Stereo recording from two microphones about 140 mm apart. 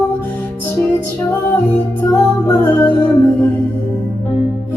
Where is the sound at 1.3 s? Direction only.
15° left (ahead or behind).